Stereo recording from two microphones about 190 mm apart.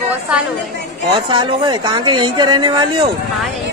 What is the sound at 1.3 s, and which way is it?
Speech, 25° right (ahead or behind).